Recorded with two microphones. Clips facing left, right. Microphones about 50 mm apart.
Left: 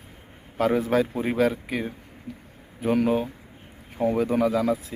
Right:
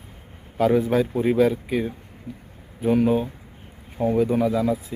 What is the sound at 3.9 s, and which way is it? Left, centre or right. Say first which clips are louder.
Speech: right 2 dB; left.